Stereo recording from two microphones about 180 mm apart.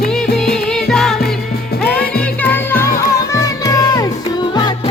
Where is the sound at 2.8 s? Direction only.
55° left (ahead or behind).